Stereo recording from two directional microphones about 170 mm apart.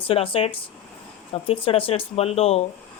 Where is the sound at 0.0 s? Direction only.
30° left (ahead or behind).